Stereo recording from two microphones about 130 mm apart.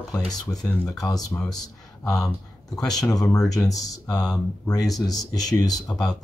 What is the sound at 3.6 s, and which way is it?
Speech, 25° left (ahead or behind).